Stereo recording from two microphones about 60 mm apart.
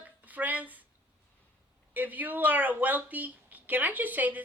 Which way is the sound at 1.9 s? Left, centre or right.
Right.